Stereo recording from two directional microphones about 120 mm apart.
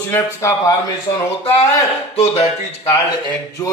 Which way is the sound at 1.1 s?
50° left (ahead or behind).